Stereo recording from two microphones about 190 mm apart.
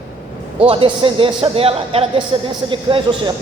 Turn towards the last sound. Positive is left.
turn(degrees=-25)  # may be behind; listen again after turning